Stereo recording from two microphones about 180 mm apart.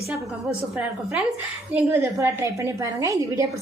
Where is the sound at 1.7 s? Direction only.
10° right (ahead or behind).